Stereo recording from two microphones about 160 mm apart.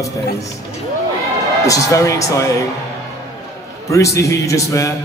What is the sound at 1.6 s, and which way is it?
Speech, 20° left (ahead or behind).